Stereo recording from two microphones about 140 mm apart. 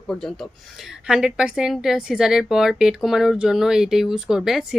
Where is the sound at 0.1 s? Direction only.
5° left (ahead or behind).